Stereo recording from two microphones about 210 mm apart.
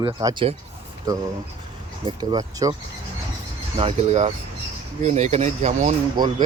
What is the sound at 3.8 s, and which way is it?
Speech, 30° right (ahead or behind).